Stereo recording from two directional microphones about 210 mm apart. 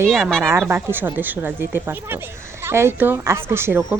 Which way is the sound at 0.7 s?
10° right (ahead or behind).